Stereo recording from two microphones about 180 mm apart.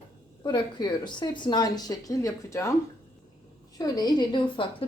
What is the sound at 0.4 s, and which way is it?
A woman's voice, 25° left (ahead or behind).